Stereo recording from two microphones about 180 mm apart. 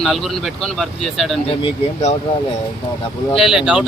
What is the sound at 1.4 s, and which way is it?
Speech, 30° left (ahead or behind).